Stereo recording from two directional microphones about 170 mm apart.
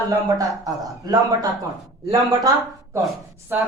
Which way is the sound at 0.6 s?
20° right (ahead or behind).